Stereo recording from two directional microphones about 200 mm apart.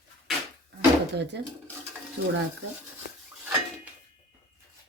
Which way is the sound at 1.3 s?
60° right (ahead or behind).